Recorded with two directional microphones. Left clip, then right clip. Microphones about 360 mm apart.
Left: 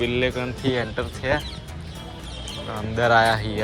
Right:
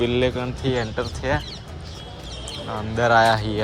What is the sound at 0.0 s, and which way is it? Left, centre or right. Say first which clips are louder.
Speech: right 2 dB; centre.